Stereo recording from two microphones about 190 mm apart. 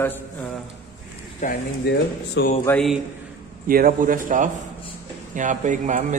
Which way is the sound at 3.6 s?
50° right (ahead or behind).